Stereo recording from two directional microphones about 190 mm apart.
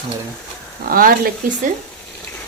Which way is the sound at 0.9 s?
50° right (ahead or behind).